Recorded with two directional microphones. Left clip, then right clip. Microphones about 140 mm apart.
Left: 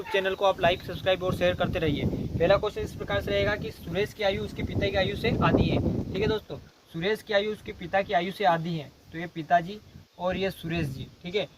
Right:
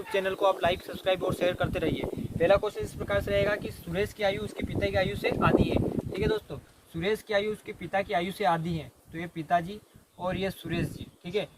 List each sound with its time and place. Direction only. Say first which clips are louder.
0.1 s speech: left 1 dB; 20° left (ahead or behind)